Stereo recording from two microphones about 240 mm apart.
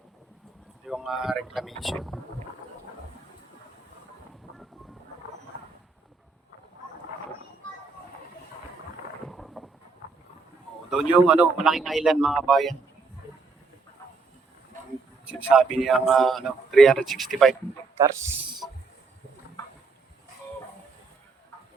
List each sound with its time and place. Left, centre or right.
0.9 s speech: centre
9.2 s a sound: centre
10.8 s speech: centre
15.3 s speech: centre
17.9 s a man's voice: centre